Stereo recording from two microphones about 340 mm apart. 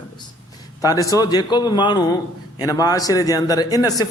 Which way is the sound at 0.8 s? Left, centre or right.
Centre.